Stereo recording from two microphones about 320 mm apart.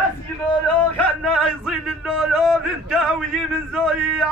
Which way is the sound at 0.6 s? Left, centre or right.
Centre.